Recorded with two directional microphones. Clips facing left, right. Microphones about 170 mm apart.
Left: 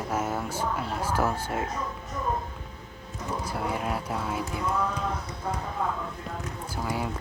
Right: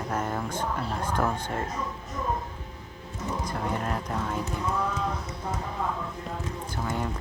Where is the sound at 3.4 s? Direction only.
5° left (ahead or behind).